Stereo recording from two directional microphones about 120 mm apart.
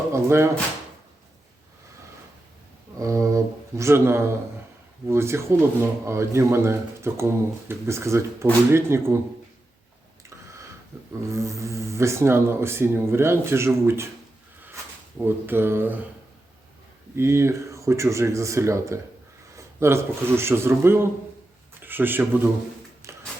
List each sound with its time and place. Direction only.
0.1 s speech: 20° right (ahead or behind)
3.0 s a sound: 25° right (ahead or behind)
5.0 s speech: 20° right (ahead or behind)
11.3 s speech: 25° right (ahead or behind)
15.2 s speech: 15° right (ahead or behind)
17.2 s speech: 20° right (ahead or behind)
23.1 s a sound: 20° right (ahead or behind)